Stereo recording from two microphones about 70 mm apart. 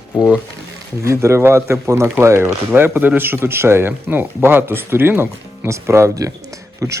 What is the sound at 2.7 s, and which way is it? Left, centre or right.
Speech, right.